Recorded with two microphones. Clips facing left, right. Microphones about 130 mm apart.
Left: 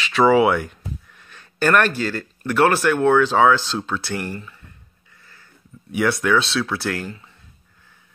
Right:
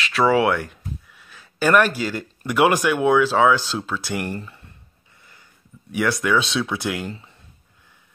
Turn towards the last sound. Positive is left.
turn(degrees=-15)  # may be behind; listen again after turning